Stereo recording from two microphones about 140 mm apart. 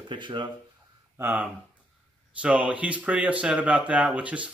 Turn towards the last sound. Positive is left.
turn(degrees=-10)  # may be behind; listen again after turning